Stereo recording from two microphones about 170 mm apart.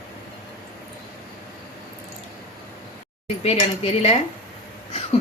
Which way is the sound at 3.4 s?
35° left (ahead or behind).